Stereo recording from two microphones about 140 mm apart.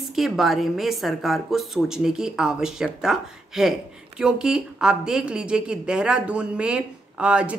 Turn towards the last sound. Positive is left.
turn(degrees=-10)  # may be behind; listen again after turning